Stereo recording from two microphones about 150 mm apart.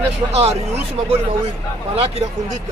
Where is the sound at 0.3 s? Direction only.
45° right (ahead or behind).